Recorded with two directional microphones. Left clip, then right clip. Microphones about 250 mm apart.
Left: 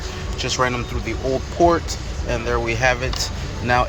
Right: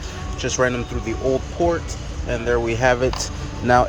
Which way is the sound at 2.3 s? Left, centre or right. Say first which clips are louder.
Right 1 dB; centre.